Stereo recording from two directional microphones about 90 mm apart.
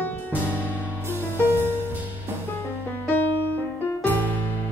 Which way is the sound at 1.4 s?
25° right (ahead or behind).